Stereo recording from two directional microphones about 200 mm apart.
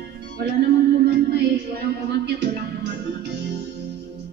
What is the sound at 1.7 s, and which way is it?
Music, 55° right (ahead or behind).